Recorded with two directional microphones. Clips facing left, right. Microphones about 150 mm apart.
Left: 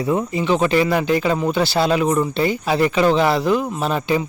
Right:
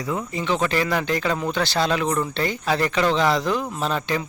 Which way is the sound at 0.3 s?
10° left (ahead or behind).